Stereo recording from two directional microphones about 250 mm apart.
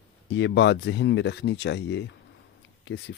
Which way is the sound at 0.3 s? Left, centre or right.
Left.